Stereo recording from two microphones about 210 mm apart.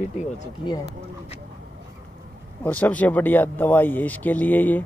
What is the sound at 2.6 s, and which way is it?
Speech, 5° left (ahead or behind).